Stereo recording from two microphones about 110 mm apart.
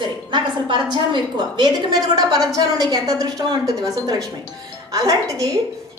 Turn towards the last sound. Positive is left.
turn(degrees=-30)  # may be behind; listen again after turning